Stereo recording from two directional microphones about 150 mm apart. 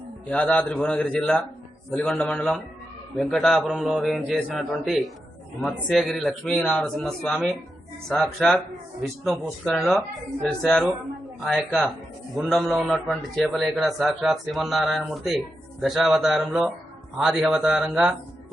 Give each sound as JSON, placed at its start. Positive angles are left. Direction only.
{"t": 0.3, "sound": "a man's voice", "side_deg": 10}
{"t": 9.6, "sound": "a man's voice", "side_deg": 0}